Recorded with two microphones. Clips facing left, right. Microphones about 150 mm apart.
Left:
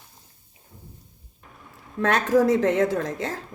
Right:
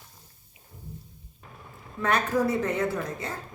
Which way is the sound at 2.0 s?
90° left.